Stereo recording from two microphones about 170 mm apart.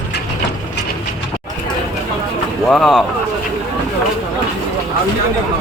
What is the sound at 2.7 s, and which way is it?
Speech, centre (ahead or behind).